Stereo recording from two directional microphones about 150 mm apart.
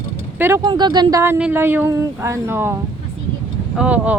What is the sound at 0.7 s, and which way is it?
Speech, 30° right (ahead or behind).